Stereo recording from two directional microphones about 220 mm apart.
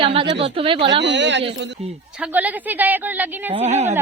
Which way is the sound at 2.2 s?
5° right (ahead or behind).